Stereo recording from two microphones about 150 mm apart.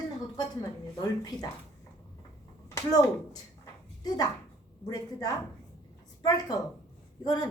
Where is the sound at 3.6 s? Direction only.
25° left (ahead or behind).